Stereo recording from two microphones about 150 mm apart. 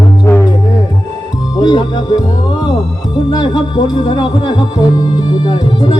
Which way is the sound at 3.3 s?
30° left (ahead or behind).